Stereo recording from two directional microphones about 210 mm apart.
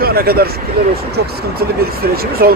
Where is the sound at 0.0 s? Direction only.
45° right (ahead or behind).